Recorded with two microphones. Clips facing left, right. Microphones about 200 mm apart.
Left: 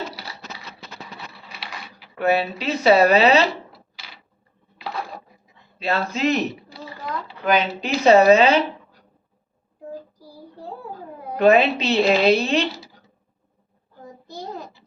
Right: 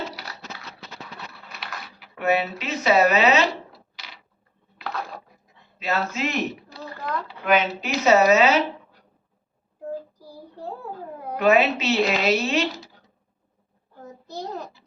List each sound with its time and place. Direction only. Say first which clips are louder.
2.1 s speech: left 2 dB; 35° left (ahead or behind)
5.8 s speech: left 4 dB; 30° left (ahead or behind)
6.7 s a sound: right 1 dB; 10° left (ahead or behind)
7.4 s speech: left 1 dB; 35° left (ahead or behind)
11.3 s speech: left 3 dB; 30° left (ahead or behind)